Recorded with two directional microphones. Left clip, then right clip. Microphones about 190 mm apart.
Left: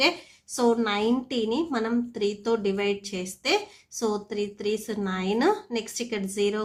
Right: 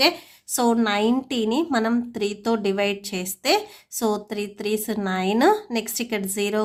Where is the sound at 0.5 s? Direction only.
35° right (ahead or behind).